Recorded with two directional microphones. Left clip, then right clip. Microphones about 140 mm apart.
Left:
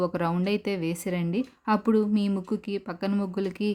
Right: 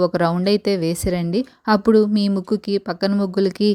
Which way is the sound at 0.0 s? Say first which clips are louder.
Right 9 dB; 35° right (ahead or behind).